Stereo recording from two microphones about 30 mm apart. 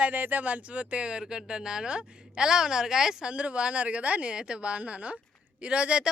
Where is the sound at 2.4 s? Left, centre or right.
Right.